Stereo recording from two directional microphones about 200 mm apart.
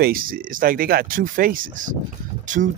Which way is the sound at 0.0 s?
45° right (ahead or behind).